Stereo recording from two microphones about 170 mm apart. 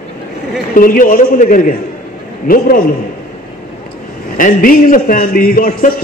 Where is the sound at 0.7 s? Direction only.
55° left (ahead or behind).